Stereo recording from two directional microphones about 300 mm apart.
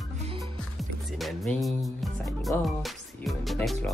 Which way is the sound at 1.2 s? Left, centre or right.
Centre.